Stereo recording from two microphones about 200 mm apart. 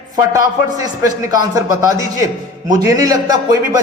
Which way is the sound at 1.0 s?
15° right (ahead or behind).